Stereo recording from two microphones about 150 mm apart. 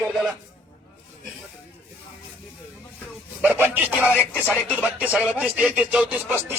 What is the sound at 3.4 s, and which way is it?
Speech, 15° right (ahead or behind).